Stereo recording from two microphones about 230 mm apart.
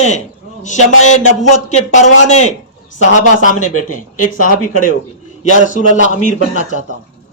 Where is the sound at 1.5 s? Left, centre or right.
Left.